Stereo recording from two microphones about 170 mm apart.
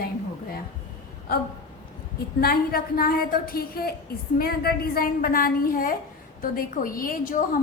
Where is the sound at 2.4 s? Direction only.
60° left (ahead or behind).